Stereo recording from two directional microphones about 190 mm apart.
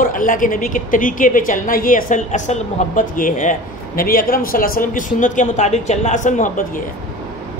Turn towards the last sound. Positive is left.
turn(degrees=45)  # may be behind; listen again after turning